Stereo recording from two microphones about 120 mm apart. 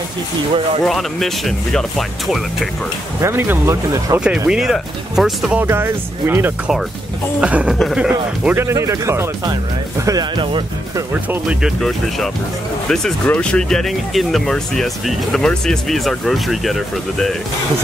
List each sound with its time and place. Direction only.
0.8 s speech: centre (ahead or behind)
3.2 s speech: 20° right (ahead or behind)
4.5 s speech: 5° right (ahead or behind)
5.6 s speech: 20° right (ahead or behind)
7.3 s a sound: 10° right (ahead or behind)
7.8 s speech: 5° right (ahead or behind)
8.5 s speech: 25° right (ahead or behind)
10.0 s speech: 35° right (ahead or behind)
11.4 s speech: centre (ahead or behind)